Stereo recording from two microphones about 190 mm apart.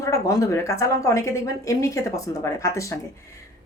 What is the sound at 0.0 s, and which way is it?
Speech, 15° left (ahead or behind).